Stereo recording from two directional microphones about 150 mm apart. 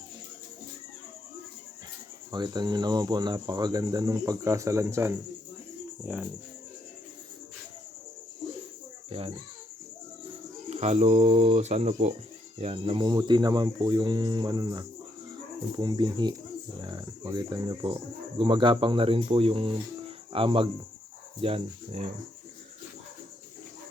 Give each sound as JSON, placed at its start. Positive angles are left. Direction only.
{"t": 2.3, "sound": "speech", "side_deg": -30}
{"t": 9.0, "sound": "insect", "side_deg": -40}
{"t": 10.7, "sound": "speech", "side_deg": -45}